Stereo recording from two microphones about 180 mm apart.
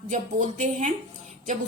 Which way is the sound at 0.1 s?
45° right (ahead or behind).